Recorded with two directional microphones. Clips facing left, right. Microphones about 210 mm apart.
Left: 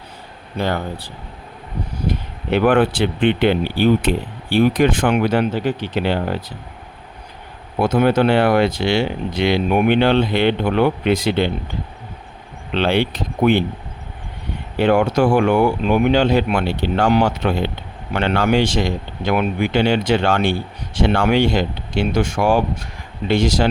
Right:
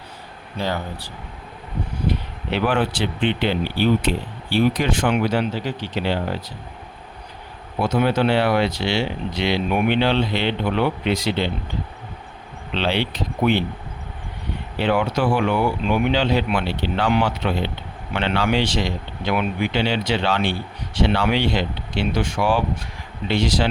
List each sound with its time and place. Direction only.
0.6 s speech: 55° left (ahead or behind)
7.8 s speech: 50° left (ahead or behind)
12.7 s speech: 50° left (ahead or behind)
14.8 s speech: 45° left (ahead or behind)